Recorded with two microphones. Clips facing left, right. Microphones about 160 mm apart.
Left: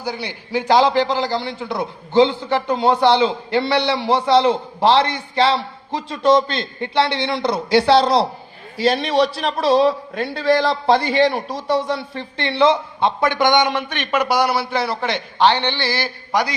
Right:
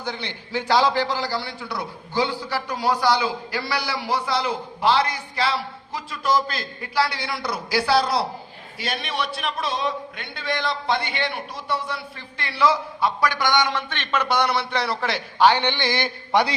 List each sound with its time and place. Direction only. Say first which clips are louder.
0.0 s a man's voice: left 4 dB; 10° left (ahead or behind); by 16.5 s 25° right (ahead or behind)